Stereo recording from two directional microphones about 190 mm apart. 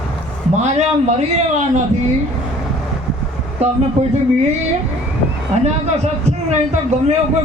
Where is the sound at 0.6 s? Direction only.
35° right (ahead or behind).